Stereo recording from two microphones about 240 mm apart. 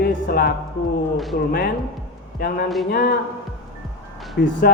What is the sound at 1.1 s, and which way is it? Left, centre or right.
Speech, centre.